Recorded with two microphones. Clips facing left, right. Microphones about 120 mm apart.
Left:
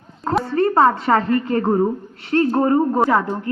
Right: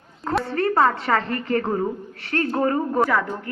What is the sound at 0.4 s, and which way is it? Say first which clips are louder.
A woman's voice: left 4 dB; 30° left (ahead or behind).